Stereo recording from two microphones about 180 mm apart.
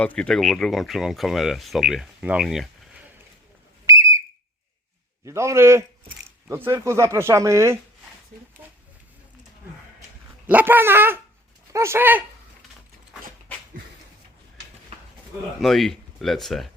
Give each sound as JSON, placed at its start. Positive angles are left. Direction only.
{"t": 0.0, "sound": "speech", "side_deg": 5}
{"t": 3.8, "sound": "whistle", "side_deg": -15}
{"t": 5.2, "sound": "speech", "side_deg": -15}
{"t": 10.4, "sound": "speech", "side_deg": -10}
{"t": 15.6, "sound": "speech", "side_deg": 0}